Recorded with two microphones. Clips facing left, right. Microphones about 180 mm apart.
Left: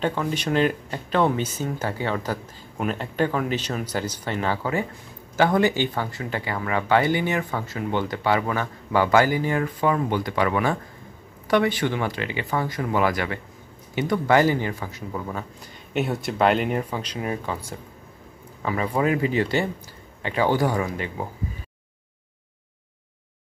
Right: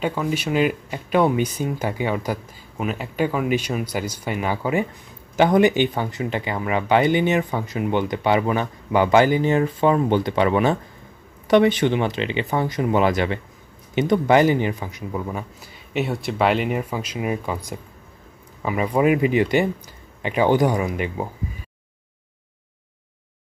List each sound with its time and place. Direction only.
0.0 s speech: 10° right (ahead or behind)
15.9 s speech: centre (ahead or behind); by 21.3 s 15° right (ahead or behind)